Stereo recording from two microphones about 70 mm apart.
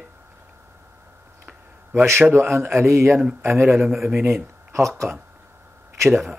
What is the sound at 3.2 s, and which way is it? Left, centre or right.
Speech, centre.